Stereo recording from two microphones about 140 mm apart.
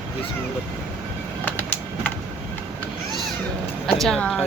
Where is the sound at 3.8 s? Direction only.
Centre (ahead or behind).